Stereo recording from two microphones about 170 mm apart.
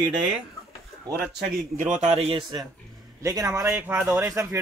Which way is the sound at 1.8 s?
45° right (ahead or behind).